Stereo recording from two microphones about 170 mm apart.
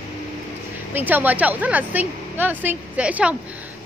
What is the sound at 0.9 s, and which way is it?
A woman's voice, 10° right (ahead or behind).